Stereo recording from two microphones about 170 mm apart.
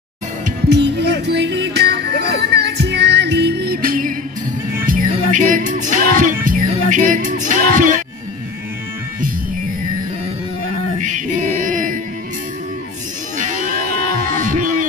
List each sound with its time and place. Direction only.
0.7 s music: 85° right; by 8.0 s 50° right (ahead or behind)
11.1 s music: 45° right (ahead or behind)
13.4 s music: 50° right (ahead or behind)